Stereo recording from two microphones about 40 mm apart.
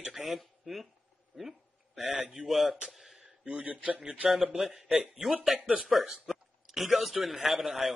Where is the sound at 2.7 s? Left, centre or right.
Centre.